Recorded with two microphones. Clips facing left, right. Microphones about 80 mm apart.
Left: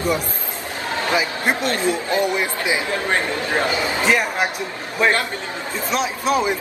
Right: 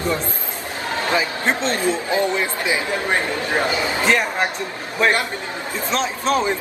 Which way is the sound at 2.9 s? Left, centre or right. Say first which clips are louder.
Even; centre.